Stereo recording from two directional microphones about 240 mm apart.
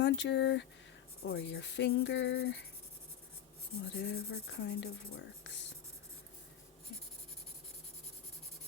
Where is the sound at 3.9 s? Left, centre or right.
Left.